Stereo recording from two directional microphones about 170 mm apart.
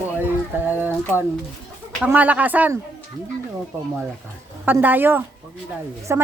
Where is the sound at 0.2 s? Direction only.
10° right (ahead or behind).